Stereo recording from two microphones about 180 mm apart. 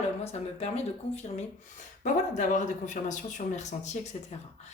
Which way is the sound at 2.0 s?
45° left (ahead or behind).